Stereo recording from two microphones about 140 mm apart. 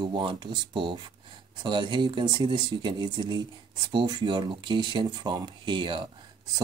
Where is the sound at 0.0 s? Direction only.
35° right (ahead or behind).